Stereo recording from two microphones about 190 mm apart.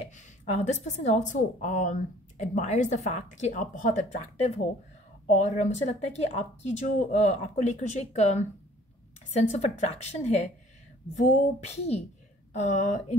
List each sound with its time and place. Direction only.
0.0 s a woman's voice: 35° left (ahead or behind)